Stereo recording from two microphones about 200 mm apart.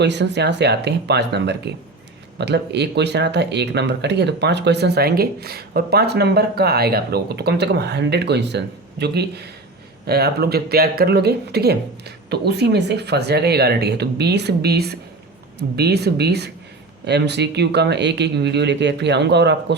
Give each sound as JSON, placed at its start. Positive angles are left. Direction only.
{"t": 0.0, "sound": "speech", "side_deg": -60}